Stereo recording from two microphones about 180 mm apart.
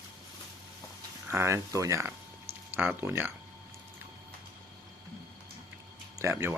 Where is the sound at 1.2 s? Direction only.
15° right (ahead or behind).